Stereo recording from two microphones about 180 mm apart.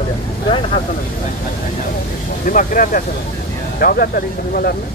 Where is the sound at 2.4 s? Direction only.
50° left (ahead or behind).